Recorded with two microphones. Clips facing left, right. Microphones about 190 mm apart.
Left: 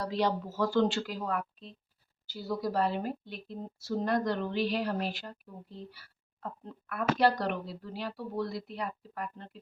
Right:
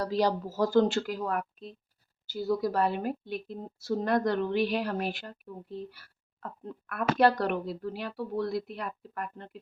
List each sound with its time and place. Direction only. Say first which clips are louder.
0.0 s a woman's voice: right 3 dB; 40° right (ahead or behind)